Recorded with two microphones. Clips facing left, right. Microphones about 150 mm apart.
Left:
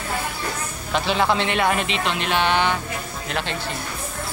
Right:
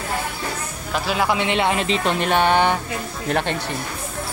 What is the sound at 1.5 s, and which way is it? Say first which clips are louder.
Speech: right 1 dB; 20° right (ahead or behind).